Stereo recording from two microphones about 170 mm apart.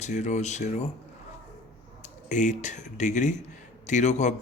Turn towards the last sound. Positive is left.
turn(degrees=45)  # may be behind; listen again after turning